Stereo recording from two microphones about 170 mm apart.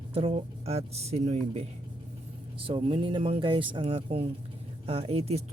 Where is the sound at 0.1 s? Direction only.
35° right (ahead or behind).